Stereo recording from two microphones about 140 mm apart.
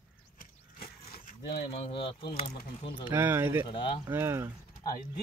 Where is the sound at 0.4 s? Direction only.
90° left.